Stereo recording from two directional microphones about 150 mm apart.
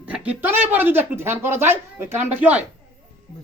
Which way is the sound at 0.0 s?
10° right (ahead or behind).